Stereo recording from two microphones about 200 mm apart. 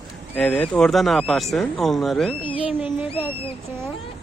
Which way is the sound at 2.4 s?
25° left (ahead or behind).